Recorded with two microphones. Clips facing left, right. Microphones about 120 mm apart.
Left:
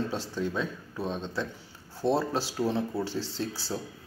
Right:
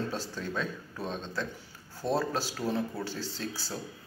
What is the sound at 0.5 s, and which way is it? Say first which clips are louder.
Speech: left 2 dB; 5° left (ahead or behind).